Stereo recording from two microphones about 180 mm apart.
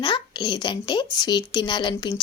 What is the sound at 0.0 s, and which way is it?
A woman's voice, 25° left (ahead or behind).